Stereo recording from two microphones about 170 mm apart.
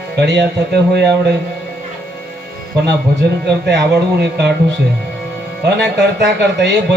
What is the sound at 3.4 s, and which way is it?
A man's voice, 75° right (ahead or behind).